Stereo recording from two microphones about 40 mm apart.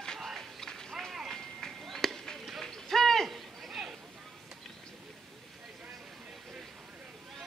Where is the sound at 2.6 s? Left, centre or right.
Centre.